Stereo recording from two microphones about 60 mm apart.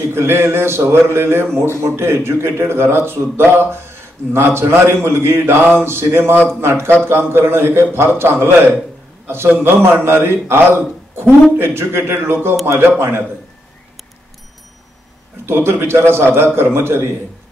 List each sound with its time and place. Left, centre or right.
0.0 s a man's voice: right
15.4 s a man's voice: right